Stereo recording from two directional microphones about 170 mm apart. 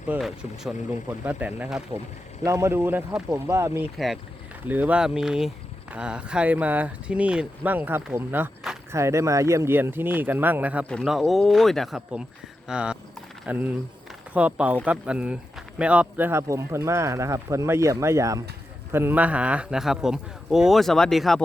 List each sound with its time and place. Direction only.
0.1 s speech: centre (ahead or behind)
3.9 s a man's voice: centre (ahead or behind)
10.8 s a man's voice: centre (ahead or behind)